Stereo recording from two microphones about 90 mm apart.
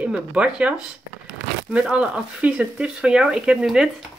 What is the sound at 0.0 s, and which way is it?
Speech, 15° right (ahead or behind).